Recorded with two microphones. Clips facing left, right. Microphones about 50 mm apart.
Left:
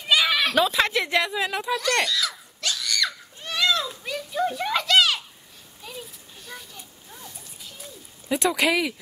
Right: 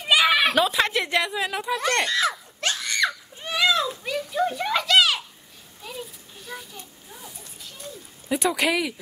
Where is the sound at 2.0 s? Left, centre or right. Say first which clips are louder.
Right 4 dB; right.